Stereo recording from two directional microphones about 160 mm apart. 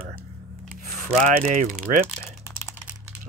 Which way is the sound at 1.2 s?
50° right (ahead or behind).